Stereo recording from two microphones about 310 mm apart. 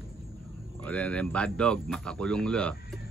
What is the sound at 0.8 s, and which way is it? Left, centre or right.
Speech, centre.